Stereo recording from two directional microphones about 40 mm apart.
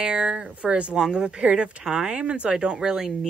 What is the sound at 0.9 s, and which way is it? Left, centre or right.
Speech, centre.